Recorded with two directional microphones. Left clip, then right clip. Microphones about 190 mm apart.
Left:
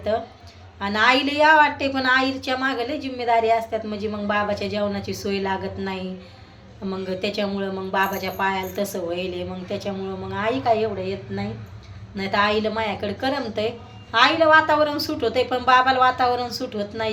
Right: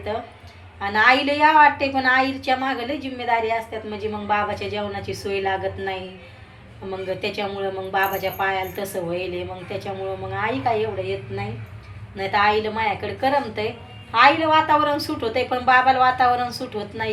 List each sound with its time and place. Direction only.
0.8 s a woman's voice: 15° left (ahead or behind)
7.1 s a woman's voice: 15° left (ahead or behind)
12.1 s a woman's voice: 15° left (ahead or behind)